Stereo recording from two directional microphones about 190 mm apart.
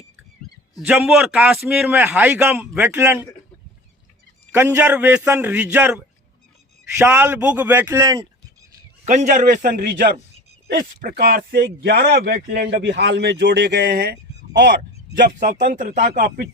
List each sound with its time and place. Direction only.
0.8 s a man's voice: 10° right (ahead or behind)
4.5 s a man's voice: 10° right (ahead or behind)
7.9 s speech: 20° right (ahead or behind)
9.0 s speech: 40° right (ahead or behind)